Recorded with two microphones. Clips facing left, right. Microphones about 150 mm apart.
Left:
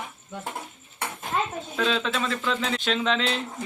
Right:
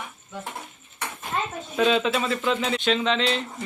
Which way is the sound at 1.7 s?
10° right (ahead or behind).